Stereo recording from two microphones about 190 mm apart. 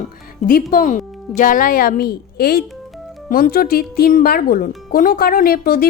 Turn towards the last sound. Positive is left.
turn(degrees=50)  # may be behind; listen again after turning